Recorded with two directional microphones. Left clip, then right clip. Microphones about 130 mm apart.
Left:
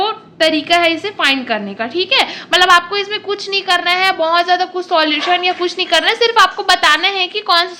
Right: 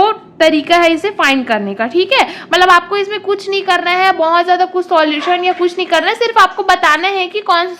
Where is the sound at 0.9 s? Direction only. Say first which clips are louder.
Right 3 dB; 35° right (ahead or behind).